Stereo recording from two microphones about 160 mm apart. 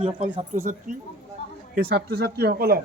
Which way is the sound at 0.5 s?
55° right (ahead or behind).